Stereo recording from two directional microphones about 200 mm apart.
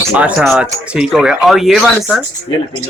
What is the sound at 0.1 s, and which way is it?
Speech, 5° right (ahead or behind).